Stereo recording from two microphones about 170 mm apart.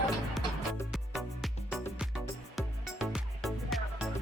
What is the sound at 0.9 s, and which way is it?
Music, centre (ahead or behind).